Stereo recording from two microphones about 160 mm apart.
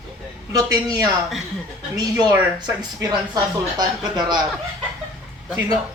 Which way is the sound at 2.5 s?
25° right (ahead or behind).